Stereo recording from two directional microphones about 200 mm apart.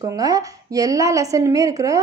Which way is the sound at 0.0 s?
15° right (ahead or behind).